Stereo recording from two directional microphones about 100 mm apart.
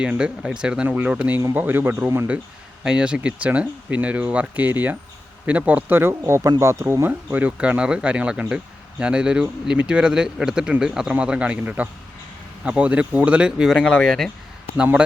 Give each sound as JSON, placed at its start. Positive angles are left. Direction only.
{"t": 0.0, "sound": "speech", "side_deg": -10}
{"t": 2.8, "sound": "speech", "side_deg": -10}